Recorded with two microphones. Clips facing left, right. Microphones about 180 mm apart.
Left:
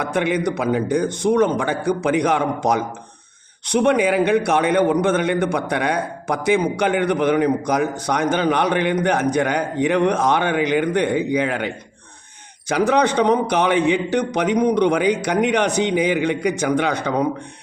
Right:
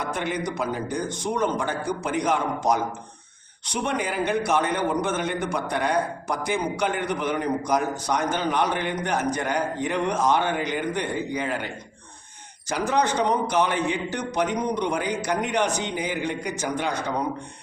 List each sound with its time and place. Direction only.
0.0 s a man's voice: 65° left (ahead or behind)